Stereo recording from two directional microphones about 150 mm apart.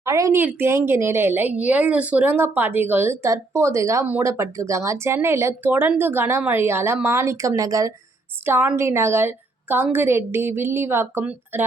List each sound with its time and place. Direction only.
0.0 s a woman's voice: 20° right (ahead or behind)